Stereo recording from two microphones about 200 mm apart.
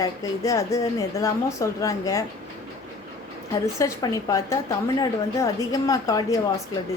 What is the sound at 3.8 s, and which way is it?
A woman's voice, 15° left (ahead or behind).